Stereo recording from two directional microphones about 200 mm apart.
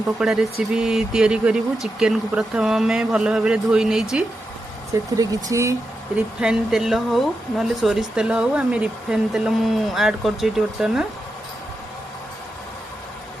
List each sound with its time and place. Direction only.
0.2 s speech: 5° right (ahead or behind)
4.9 s speech: 15° right (ahead or behind)
6.4 s speech: 5° right (ahead or behind)